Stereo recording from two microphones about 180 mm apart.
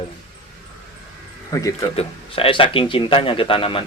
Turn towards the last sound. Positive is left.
turn(degrees=30)  # may be behind; listen again after turning